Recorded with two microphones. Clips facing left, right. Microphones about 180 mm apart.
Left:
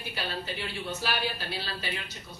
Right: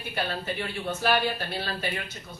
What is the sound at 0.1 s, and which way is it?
Speech, 55° right (ahead or behind).